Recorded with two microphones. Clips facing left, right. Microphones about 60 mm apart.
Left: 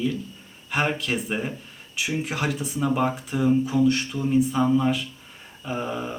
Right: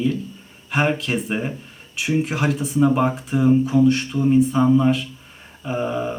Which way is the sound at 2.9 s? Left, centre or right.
Centre.